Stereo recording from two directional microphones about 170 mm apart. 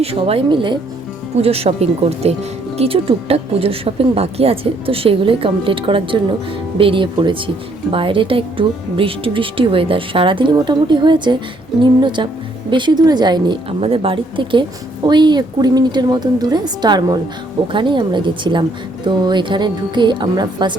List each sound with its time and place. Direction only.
0.0 s a woman's voice: 35° right (ahead or behind)